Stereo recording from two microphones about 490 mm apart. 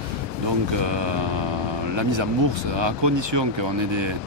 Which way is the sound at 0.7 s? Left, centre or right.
Right.